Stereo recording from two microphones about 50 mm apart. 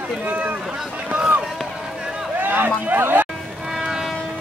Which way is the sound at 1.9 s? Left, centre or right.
Centre.